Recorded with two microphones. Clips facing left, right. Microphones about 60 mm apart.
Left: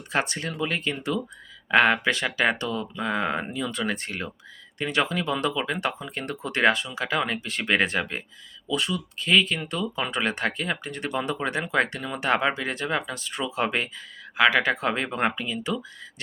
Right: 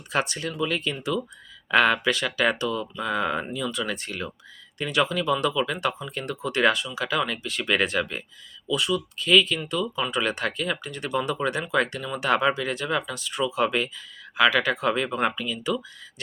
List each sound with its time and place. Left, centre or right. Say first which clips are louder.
0.1 s speech: even; left